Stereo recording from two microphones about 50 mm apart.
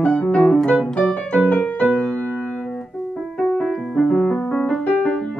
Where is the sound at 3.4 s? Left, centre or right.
Centre.